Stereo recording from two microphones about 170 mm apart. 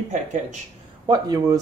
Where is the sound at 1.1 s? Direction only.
20° right (ahead or behind).